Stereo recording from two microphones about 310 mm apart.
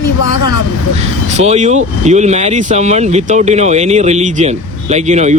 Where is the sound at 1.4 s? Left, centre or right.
Right.